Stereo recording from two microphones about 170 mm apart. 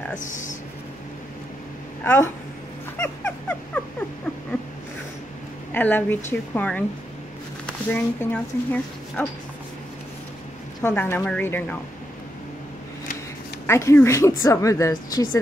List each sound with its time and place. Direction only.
0.2 s speech: 50° left (ahead or behind)
3.0 s dog: 10° left (ahead or behind)
5.7 s a woman's voice: 10° left (ahead or behind)
10.8 s a woman's voice: 15° left (ahead or behind)
13.7 s a woman's voice: 15° left (ahead or behind)